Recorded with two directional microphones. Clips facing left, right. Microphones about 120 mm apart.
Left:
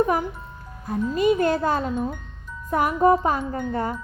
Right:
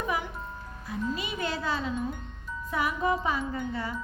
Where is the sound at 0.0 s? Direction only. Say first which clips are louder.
Left 9 dB; 45° left (ahead or behind).